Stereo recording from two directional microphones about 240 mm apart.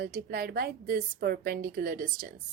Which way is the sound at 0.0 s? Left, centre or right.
Right.